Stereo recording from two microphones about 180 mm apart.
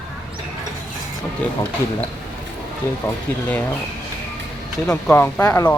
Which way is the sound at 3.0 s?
10° left (ahead or behind).